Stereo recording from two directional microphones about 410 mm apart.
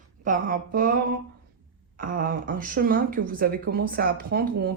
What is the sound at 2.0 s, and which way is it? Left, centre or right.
Speech, right.